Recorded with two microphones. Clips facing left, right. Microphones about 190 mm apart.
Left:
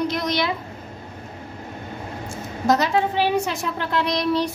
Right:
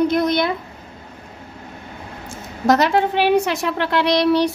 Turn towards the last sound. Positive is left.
turn(degrees=-75)  # may be behind; listen again after turning